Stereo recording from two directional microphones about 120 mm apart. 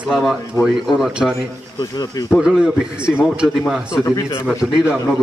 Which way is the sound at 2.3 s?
5° right (ahead or behind).